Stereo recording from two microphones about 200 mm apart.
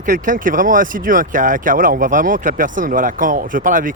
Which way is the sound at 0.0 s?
40° right (ahead or behind).